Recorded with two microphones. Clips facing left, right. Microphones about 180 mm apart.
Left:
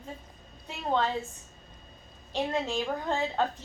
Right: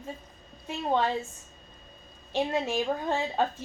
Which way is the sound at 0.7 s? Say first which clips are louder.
Right 2 dB; 15° right (ahead or behind).